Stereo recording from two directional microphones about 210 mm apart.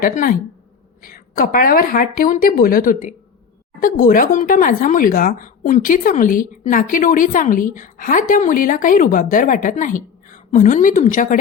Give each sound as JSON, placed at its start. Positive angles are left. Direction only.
{"t": 0.0, "sound": "speech", "side_deg": 40}